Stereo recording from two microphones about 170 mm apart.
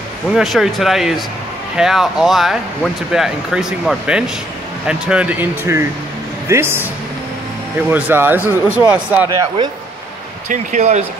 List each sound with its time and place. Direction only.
0.3 s speech: centre (ahead or behind)
7.9 s speech: 10° right (ahead or behind)
10.5 s speech: 45° right (ahead or behind)